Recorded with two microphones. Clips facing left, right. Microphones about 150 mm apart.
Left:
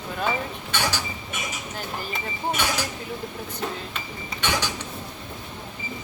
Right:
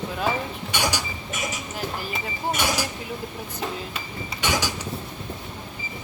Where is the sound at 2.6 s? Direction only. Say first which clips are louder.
Right 2 dB; 10° right (ahead or behind).